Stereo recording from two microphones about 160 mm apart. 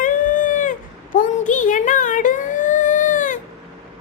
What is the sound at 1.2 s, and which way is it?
Music, 55° left (ahead or behind).